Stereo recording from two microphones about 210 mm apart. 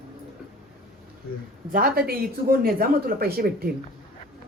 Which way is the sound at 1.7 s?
45° right (ahead or behind).